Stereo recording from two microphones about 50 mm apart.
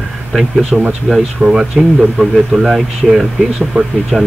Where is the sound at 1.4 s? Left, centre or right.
Centre.